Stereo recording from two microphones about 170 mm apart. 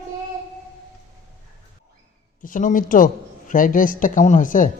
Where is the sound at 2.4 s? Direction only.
50° left (ahead or behind).